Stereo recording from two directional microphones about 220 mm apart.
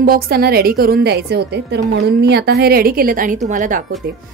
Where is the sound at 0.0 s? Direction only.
45° right (ahead or behind).